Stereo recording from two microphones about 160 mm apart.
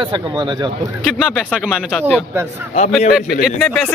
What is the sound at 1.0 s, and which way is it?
Speech, centre (ahead or behind).